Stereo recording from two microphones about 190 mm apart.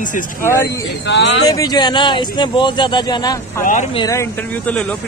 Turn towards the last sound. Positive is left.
turn(degrees=5)  # may be behind; listen again after turning